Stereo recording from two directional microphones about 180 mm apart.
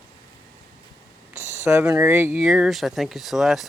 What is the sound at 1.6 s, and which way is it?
Speech, 15° right (ahead or behind).